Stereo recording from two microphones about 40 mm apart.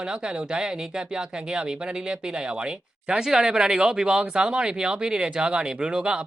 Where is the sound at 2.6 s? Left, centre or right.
Right.